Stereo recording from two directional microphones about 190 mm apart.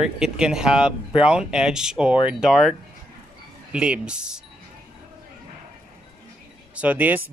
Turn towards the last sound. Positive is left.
turn(degrees=-10)  # may be behind; listen again after turning